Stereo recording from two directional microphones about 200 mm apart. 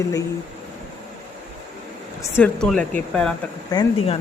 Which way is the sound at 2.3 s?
5° left (ahead or behind).